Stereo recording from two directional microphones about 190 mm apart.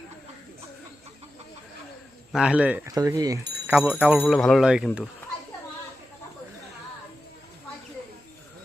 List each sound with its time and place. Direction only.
2.3 s speech: 5° right (ahead or behind)
2.9 s speech: 20° right (ahead or behind)
4.2 s speech: centre (ahead or behind)